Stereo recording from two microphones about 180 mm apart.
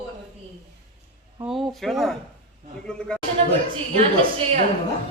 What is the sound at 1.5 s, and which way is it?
Speech, centre (ahead or behind).